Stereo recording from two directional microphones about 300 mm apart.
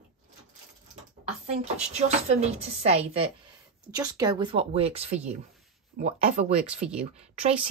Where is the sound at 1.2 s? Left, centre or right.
Centre.